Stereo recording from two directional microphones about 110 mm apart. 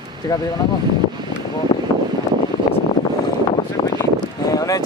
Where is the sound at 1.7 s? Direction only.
45° left (ahead or behind).